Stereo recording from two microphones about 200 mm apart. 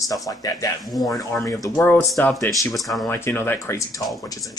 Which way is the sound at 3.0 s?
10° left (ahead or behind).